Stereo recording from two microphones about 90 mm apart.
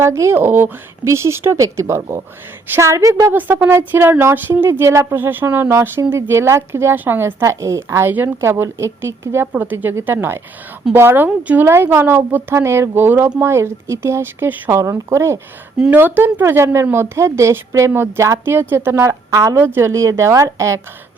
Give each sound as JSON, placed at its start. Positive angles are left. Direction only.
{"t": 0.0, "sound": "speech", "side_deg": -30}
{"t": 3.3, "sound": "speech", "side_deg": -20}
{"t": 15.8, "sound": "speech", "side_deg": -20}